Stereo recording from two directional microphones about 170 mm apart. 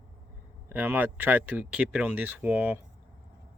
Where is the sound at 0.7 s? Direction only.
10° right (ahead or behind).